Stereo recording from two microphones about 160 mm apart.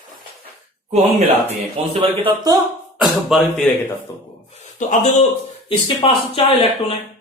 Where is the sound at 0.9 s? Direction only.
45° right (ahead or behind).